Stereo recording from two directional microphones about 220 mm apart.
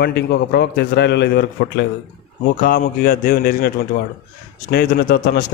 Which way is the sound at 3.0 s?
45° left (ahead or behind).